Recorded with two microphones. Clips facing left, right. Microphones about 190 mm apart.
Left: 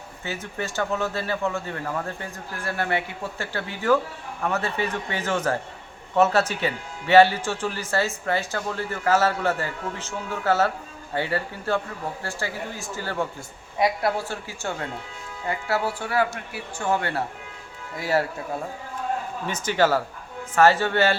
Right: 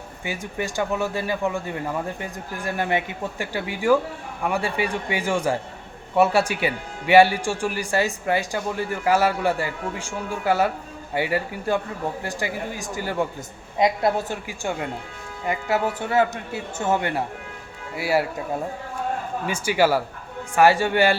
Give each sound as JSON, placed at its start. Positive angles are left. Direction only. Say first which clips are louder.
{"t": 0.3, "sound": "speech", "louder": "right 2 dB", "side_deg": -15}
{"t": 19.5, "sound": "speech", "louder": "right 1 dB", "side_deg": -10}